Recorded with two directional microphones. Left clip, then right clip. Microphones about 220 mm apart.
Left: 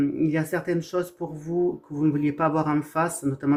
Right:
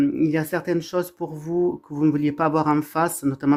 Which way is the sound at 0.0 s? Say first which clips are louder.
Right 3 dB; 40° right (ahead or behind).